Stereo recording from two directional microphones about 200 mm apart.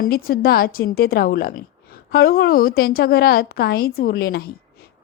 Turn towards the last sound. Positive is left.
turn(degrees=50)  # may be behind; listen again after turning